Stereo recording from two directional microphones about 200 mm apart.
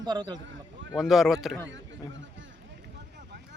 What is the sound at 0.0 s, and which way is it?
Speech, 20° right (ahead or behind).